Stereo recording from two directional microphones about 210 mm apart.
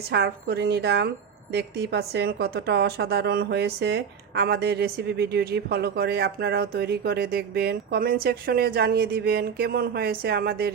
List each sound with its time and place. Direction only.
0.1 s a woman's voice: 50° right (ahead or behind)